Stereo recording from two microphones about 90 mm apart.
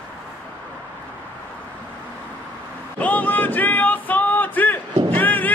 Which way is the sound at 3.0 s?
20° left (ahead or behind).